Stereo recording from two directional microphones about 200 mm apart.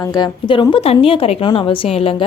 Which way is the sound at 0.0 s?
20° left (ahead or behind).